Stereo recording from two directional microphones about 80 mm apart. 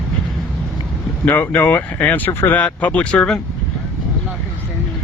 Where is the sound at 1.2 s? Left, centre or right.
Left.